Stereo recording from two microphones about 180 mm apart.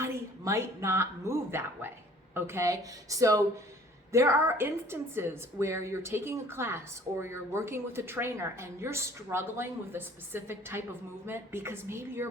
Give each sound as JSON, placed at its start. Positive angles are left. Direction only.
{"t": 0.0, "sound": "a woman's voice", "side_deg": -15}